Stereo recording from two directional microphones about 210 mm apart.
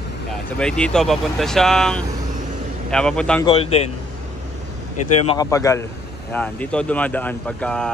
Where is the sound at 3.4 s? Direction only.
25° left (ahead or behind).